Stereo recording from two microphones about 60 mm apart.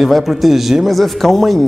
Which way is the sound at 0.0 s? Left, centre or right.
Centre.